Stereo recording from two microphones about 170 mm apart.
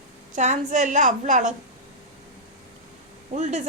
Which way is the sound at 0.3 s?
45° right (ahead or behind).